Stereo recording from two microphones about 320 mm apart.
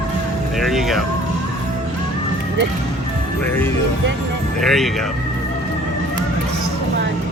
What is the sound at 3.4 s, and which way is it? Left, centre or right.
Speech, centre.